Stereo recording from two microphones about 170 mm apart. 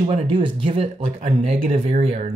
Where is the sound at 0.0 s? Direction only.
30° right (ahead or behind).